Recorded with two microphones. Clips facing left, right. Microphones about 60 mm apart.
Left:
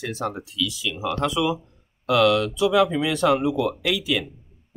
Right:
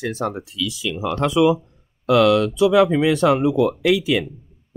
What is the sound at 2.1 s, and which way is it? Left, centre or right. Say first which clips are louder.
Speech: right 4 dB; right.